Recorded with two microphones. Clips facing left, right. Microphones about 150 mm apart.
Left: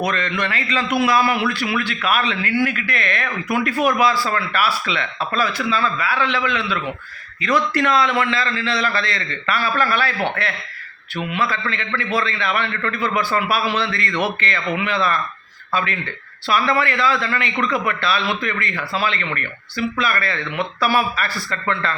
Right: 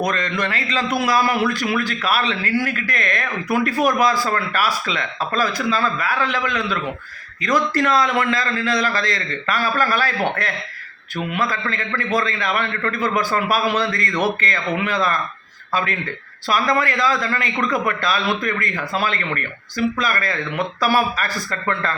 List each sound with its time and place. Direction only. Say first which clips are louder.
0.0 s a man's voice: even; 40° right (ahead or behind)